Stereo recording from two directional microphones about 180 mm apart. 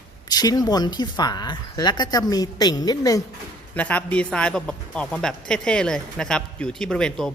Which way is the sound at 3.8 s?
10° left (ahead or behind).